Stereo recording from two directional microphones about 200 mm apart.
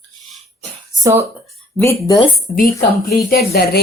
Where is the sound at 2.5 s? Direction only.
45° left (ahead or behind).